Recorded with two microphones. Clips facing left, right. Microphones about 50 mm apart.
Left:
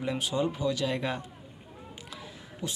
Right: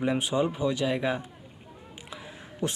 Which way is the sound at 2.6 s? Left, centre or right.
Right.